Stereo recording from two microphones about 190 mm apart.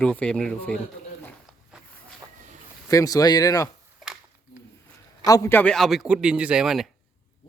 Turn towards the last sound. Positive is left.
turn(degrees=0)  # may be behind; listen again after turning